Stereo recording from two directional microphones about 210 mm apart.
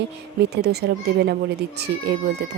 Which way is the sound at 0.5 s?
50° right (ahead or behind).